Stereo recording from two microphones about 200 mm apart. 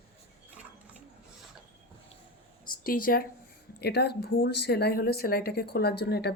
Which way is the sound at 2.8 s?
45° left (ahead or behind).